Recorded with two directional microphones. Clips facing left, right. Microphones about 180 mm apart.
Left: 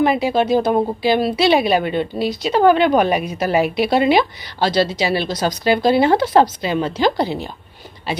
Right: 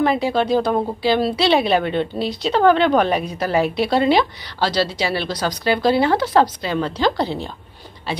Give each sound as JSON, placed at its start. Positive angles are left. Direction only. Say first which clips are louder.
{"t": 0.0, "sound": "speech", "louder": "left 2 dB", "side_deg": 15}